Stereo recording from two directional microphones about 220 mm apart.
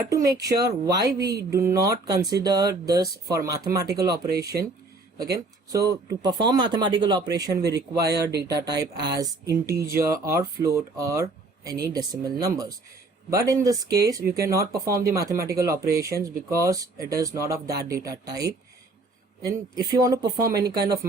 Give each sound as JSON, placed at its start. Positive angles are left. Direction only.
{"t": 0.1, "sound": "speech", "side_deg": -15}
{"t": 4.3, "sound": "speech", "side_deg": -45}
{"t": 5.1, "sound": "speech", "side_deg": -15}
{"t": 8.3, "sound": "speech", "side_deg": -50}
{"t": 8.7, "sound": "speech", "side_deg": -20}